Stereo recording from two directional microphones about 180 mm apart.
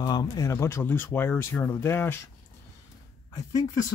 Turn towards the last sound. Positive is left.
turn(degrees=20)  # may be behind; listen again after turning